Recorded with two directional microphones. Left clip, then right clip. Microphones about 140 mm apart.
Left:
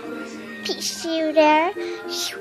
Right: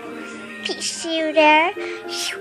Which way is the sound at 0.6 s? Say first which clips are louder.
Right 1 dB; 5° left (ahead or behind).